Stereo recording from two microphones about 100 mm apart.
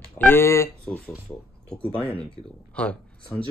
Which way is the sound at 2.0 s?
70° left (ahead or behind).